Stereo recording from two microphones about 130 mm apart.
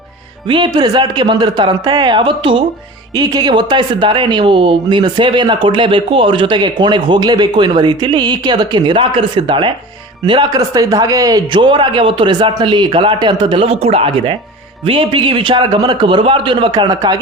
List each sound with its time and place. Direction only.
0.4 s speech: 35° right (ahead or behind)